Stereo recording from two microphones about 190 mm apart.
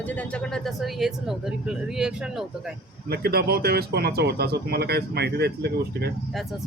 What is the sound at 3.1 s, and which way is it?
Speech, 55° right (ahead or behind).